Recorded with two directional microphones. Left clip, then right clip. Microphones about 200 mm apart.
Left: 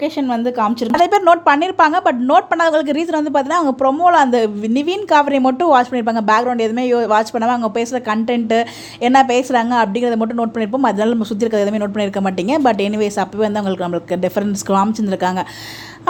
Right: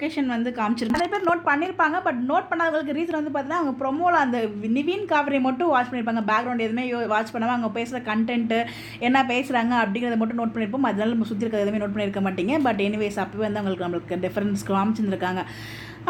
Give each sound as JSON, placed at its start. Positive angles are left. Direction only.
{"t": 0.0, "sound": "a woman's voice", "side_deg": 30}
{"t": 1.0, "sound": "a woman's voice", "side_deg": 45}